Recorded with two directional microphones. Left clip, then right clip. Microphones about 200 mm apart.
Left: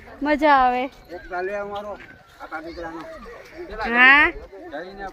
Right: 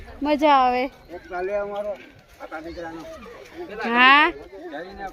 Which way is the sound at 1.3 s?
35° left (ahead or behind).